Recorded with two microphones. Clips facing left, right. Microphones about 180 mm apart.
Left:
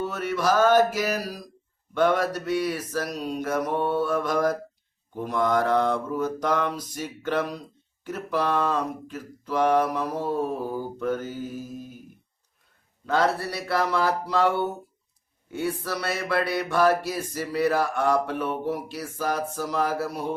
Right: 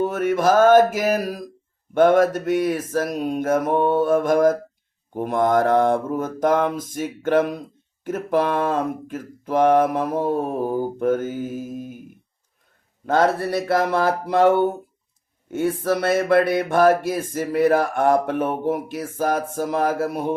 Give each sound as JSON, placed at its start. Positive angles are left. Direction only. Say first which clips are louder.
{"t": 0.0, "sound": "mantra", "louder": "right 7 dB", "side_deg": -50}
{"t": 13.1, "sound": "mantra", "louder": "right 5 dB", "side_deg": -50}